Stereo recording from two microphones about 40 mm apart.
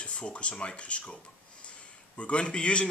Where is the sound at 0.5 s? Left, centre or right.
Centre.